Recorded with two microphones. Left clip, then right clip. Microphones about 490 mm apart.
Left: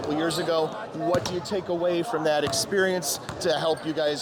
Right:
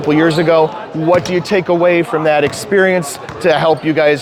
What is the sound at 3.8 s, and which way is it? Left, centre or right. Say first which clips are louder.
Speech: right 14 dB; right.